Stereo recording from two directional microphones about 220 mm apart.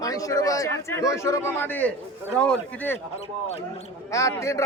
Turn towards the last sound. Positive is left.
turn(degrees=15)  # may be behind; listen again after turning